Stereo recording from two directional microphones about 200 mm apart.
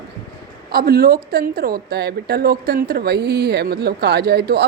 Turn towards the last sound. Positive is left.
turn(degrees=-55)  # may be behind; listen again after turning